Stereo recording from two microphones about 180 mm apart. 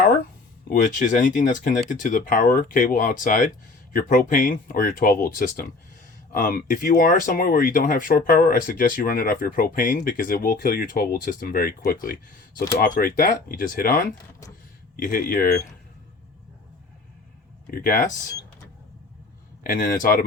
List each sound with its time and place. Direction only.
0.7 s speech: 45° left (ahead or behind)
17.7 s speech: 45° left (ahead or behind)
19.6 s speech: 45° left (ahead or behind)